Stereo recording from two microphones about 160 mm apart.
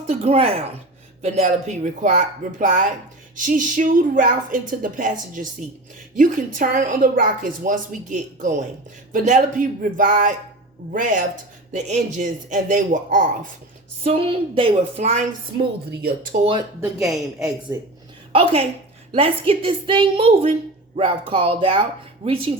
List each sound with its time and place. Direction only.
0.1 s a woman's voice: 40° right (ahead or behind); by 5.1 s 55° right (ahead or behind)
6.1 s a woman's voice: 55° right (ahead or behind)
14.0 s speech: 40° right (ahead or behind)
15.9 s speech: 75° right (ahead or behind)
16.4 s speech: 35° right (ahead or behind)
17.0 s speech: centre (ahead or behind)
18.3 s a woman's voice: 35° right (ahead or behind)